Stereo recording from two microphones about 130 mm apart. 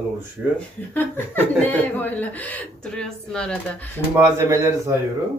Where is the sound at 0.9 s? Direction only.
15° left (ahead or behind).